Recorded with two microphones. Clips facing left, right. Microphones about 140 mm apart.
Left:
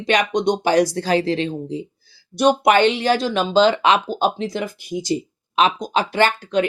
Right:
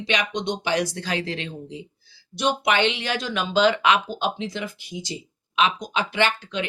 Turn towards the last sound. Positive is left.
turn(degrees=40)  # may be behind; listen again after turning